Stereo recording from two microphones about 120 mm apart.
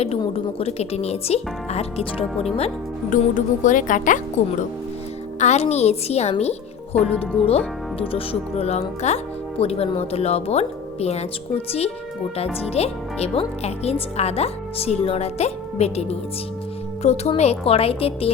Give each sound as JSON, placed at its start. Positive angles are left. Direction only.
{"t": 0.3, "sound": "speech", "side_deg": 55}
{"t": 2.6, "sound": "speech", "side_deg": 75}
{"t": 5.4, "sound": "speech", "side_deg": 70}